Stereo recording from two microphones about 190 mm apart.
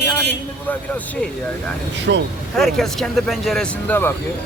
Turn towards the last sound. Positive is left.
turn(degrees=10)  # may be behind; listen again after turning